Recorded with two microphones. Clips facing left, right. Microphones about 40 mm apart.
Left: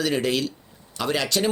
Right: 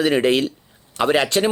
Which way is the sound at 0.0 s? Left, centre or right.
Right.